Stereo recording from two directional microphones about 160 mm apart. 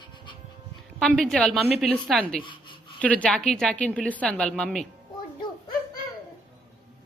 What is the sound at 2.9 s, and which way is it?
A woman's voice, 10° left (ahead or behind).